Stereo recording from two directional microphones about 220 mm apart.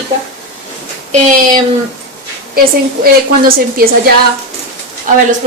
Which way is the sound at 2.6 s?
40° right (ahead or behind).